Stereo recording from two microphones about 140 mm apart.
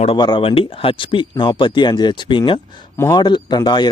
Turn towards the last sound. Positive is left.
turn(degrees=30)  # may be behind; listen again after turning